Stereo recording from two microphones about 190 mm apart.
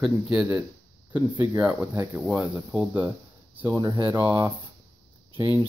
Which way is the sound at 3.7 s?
20° right (ahead or behind).